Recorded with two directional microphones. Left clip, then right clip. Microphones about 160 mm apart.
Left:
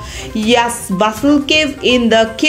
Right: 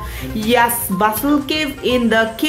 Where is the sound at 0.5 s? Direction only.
15° left (ahead or behind).